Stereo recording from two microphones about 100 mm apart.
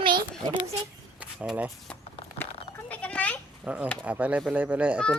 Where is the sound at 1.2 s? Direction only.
10° right (ahead or behind).